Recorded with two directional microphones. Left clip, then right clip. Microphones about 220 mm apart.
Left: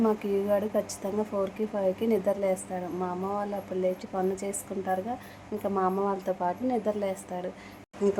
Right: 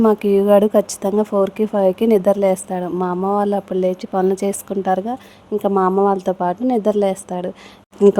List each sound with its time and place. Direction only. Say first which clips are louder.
0.0 s a woman's voice: right 13 dB; 45° right (ahead or behind)